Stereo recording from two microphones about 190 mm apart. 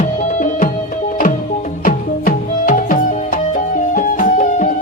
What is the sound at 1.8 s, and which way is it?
Music, 45° left (ahead or behind).